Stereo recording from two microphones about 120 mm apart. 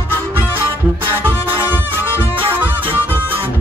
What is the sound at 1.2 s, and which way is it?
Music, 15° right (ahead or behind).